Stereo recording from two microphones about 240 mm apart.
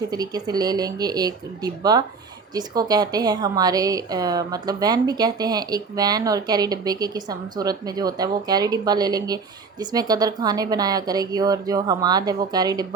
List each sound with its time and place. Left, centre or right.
0.1 s a woman's voice: centre